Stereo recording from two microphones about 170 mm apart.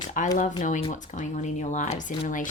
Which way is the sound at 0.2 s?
50° left (ahead or behind).